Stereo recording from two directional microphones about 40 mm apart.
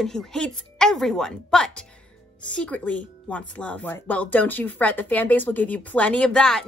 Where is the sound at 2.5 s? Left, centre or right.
Left.